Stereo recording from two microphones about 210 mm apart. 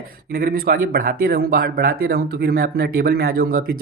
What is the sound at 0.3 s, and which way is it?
Speech, 45° right (ahead or behind).